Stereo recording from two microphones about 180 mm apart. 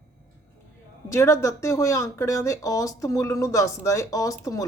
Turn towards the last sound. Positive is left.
turn(degrees=20)  # may be behind; listen again after turning